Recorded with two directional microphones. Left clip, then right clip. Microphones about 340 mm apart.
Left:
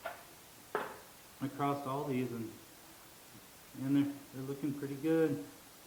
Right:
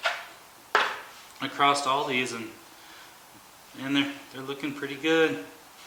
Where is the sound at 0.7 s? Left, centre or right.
Centre.